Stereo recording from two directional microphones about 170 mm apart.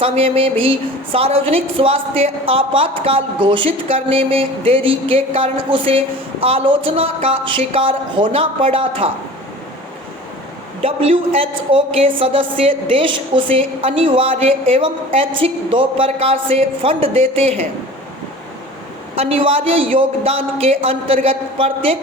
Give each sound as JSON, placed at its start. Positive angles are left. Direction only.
{"t": 0.0, "sound": "a woman's voice", "side_deg": -35}
{"t": 10.8, "sound": "a woman's voice", "side_deg": -35}
{"t": 19.1, "sound": "a woman's voice", "side_deg": -35}